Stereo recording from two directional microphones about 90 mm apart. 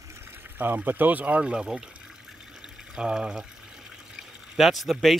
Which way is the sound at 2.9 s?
10° right (ahead or behind).